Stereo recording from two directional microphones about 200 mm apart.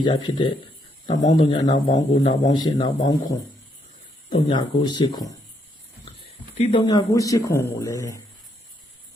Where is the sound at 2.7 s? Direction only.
20° left (ahead or behind).